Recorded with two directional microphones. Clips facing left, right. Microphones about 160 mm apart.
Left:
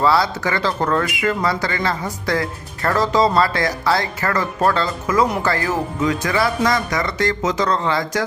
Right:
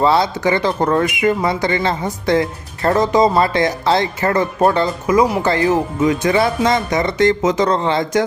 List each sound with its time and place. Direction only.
0.0 s speech: 20° right (ahead or behind)